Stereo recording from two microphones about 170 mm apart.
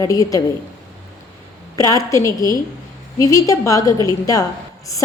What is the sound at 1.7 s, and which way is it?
A woman's voice, 20° left (ahead or behind).